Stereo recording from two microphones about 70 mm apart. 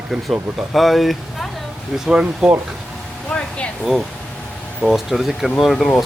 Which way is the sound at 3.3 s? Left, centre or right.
Centre.